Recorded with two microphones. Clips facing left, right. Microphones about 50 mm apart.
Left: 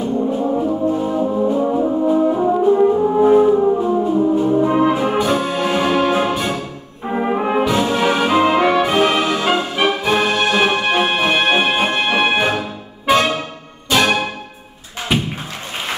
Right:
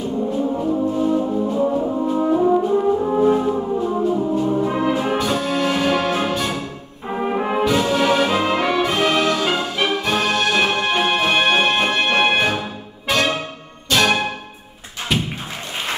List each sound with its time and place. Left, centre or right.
0.6 s brass instrument: centre
12.4 s music: centre
15.1 s thump: centre